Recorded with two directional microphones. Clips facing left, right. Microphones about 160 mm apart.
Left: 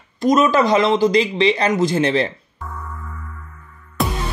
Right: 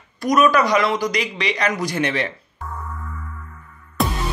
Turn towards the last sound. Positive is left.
turn(degrees=0)  # may be behind; listen again after turning